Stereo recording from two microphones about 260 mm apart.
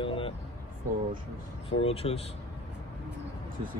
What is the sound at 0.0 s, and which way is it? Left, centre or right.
Vehicle, left.